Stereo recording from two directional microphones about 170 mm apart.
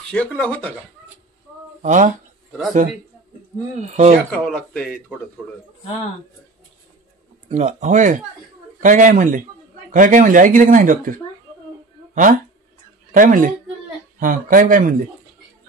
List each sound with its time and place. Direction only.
0.1 s speech: 5° left (ahead or behind)
1.8 s speech: 45° right (ahead or behind)
3.9 s a man's voice: 40° right (ahead or behind)
4.3 s speech: 5° left (ahead or behind)
7.4 s speech: 40° right (ahead or behind)